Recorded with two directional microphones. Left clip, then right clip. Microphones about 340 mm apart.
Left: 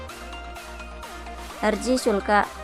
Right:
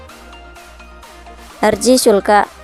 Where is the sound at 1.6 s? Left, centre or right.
Centre.